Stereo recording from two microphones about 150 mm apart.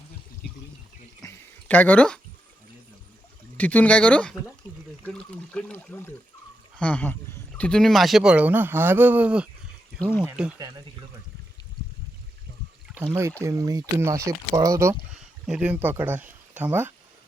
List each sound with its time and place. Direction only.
1.2 s a sound: 15° left (ahead or behind)
3.6 s speech: 10° left (ahead or behind); by 9.5 s 10° right (ahead or behind)
10.0 s speech: 10° left (ahead or behind)
10.2 s speech: 5° right (ahead or behind)
13.4 s speech: 20° right (ahead or behind)
15.1 s speech: 5° right (ahead or behind)